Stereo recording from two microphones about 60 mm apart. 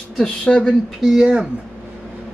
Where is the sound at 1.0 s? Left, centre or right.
Centre.